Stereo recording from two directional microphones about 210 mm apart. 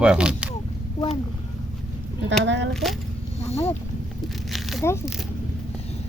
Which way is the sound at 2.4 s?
60° right (ahead or behind).